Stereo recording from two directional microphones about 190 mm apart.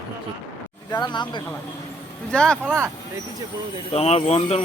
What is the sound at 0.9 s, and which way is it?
Speech, 20° left (ahead or behind).